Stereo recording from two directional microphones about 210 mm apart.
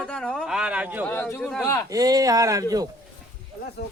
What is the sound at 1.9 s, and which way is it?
Speech, 15° right (ahead or behind).